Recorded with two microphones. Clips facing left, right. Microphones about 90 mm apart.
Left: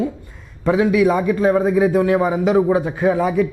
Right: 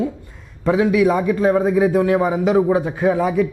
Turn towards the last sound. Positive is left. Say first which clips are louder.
# even
turn(degrees=15)  # may be behind; listen again after turning